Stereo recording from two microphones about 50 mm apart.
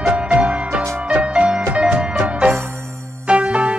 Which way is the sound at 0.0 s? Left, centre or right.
Right.